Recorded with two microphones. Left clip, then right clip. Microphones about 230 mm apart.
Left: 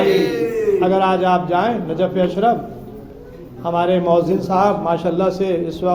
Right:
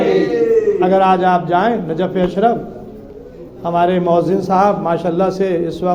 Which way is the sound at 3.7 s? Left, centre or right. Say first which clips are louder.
Right 2 dB; right.